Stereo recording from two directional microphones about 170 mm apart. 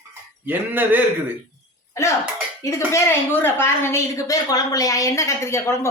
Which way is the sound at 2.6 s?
15° left (ahead or behind).